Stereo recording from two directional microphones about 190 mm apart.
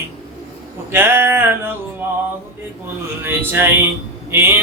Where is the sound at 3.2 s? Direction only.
10° right (ahead or behind).